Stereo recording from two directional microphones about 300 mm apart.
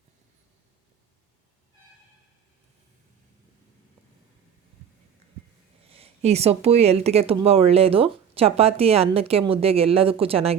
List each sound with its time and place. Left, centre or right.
5.9 s speech: centre